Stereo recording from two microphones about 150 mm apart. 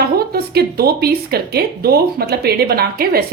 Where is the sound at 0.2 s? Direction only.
90° right.